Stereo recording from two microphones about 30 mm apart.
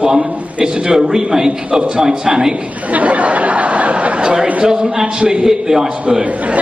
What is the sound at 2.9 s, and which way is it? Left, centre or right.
Chatter, right.